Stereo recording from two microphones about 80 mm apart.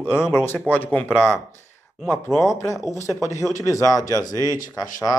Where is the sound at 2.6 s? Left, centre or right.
Left.